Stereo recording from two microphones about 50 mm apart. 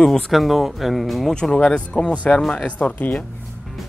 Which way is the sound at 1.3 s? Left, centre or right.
Centre.